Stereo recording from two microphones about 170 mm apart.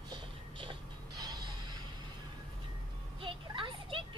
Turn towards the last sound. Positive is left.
turn(degrees=-30)  # may be behind; listen again after turning